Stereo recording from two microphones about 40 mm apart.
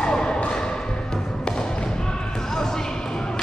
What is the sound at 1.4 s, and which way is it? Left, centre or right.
Basketball bounce, centre.